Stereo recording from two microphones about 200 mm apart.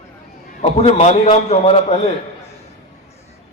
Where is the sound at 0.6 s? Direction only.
30° left (ahead or behind).